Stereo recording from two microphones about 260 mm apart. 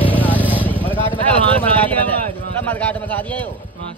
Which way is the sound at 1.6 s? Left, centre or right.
Centre.